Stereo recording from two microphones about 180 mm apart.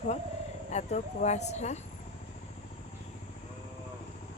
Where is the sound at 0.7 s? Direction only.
40° left (ahead or behind).